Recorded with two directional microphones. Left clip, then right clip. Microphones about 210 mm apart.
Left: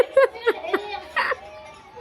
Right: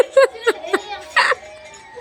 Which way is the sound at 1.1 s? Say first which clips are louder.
Right 8 dB; 20° right (ahead or behind).